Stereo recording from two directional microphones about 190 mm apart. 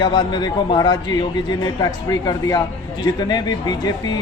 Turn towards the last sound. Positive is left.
turn(degrees=20)  # may be behind; listen again after turning